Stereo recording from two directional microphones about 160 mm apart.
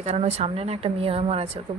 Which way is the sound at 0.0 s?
40° right (ahead or behind).